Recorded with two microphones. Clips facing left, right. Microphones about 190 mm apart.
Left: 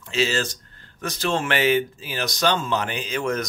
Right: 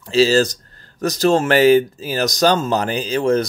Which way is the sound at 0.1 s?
35° right (ahead or behind).